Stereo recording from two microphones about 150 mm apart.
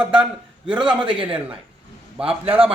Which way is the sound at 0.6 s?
30° right (ahead or behind).